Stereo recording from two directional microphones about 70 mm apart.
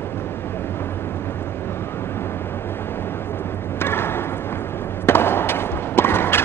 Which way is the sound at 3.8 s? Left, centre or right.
Left.